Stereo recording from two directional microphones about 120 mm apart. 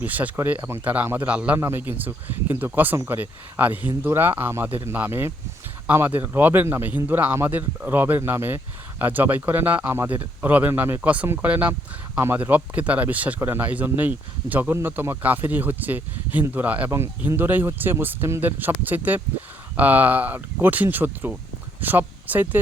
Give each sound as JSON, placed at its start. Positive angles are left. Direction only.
{"t": 0.0, "sound": "speech", "side_deg": -15}